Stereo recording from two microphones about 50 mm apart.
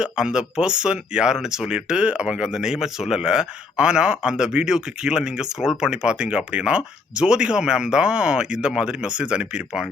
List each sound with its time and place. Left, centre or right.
0.0 s speech: centre